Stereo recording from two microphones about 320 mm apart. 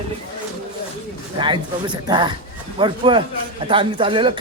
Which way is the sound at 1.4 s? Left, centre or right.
Centre.